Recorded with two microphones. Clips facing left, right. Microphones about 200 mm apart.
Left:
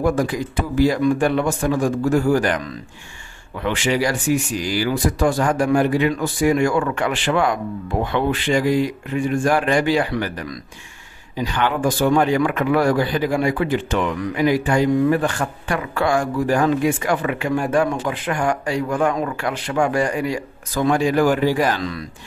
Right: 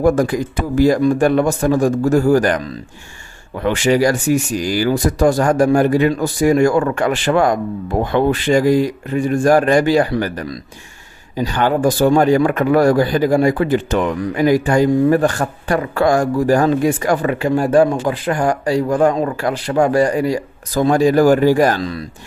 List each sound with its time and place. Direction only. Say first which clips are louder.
0.0 s speech: right 5 dB; 45° right (ahead or behind)